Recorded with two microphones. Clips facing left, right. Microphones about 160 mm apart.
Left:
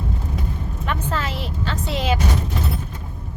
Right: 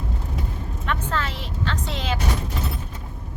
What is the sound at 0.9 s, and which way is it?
A woman's voice, 5° left (ahead or behind).